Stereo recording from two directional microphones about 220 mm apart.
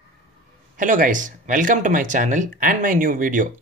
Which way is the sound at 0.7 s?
40° right (ahead or behind).